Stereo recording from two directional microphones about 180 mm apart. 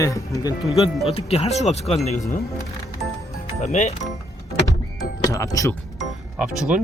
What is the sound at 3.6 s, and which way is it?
Speech, 40° left (ahead or behind).